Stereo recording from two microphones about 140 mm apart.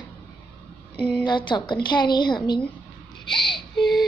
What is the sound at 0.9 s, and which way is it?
Speech, 10° left (ahead or behind).